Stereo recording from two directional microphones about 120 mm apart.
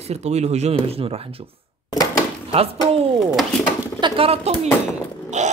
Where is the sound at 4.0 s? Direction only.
50° right (ahead or behind).